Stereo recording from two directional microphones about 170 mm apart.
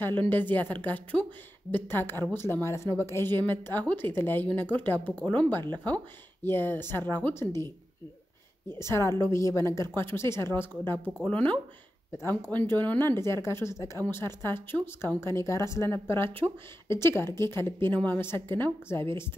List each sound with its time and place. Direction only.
0.2 s speech: 10° left (ahead or behind)
8.6 s speech: 15° left (ahead or behind)